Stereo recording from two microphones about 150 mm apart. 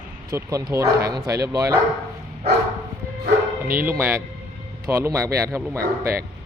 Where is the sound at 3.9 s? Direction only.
15° right (ahead or behind).